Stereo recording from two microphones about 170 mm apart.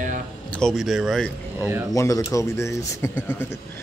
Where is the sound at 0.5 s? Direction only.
Centre (ahead or behind).